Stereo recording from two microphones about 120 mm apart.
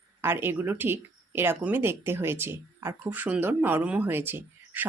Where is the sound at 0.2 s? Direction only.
20° right (ahead or behind).